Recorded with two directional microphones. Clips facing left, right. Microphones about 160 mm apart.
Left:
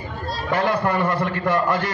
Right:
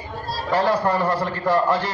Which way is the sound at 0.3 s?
35° right (ahead or behind).